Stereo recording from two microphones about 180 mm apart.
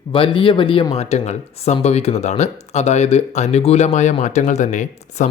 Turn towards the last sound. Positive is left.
turn(degrees=40)  # may be behind; listen again after turning